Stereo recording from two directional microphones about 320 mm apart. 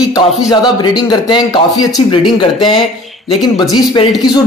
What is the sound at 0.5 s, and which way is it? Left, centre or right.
Speech, centre.